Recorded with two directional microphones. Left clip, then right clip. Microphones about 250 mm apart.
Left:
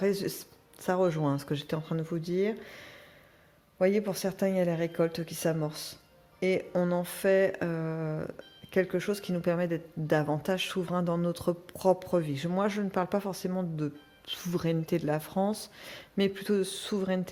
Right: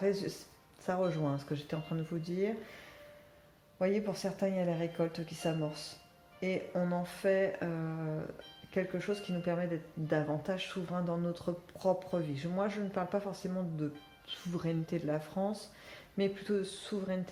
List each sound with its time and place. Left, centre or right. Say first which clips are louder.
0.0 s speech: left 4 dB; left